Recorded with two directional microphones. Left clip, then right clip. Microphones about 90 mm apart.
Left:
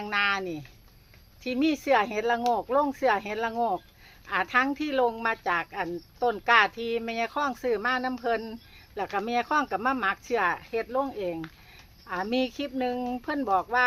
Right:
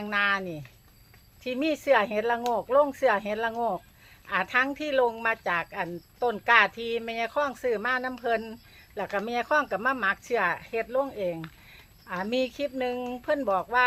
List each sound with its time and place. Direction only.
0.0 s speech: 25° left (ahead or behind)